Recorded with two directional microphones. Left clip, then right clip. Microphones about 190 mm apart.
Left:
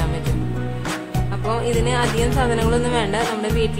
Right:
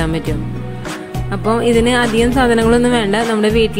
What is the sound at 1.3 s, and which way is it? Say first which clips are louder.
A woman's voice: right 8 dB; 30° right (ahead or behind).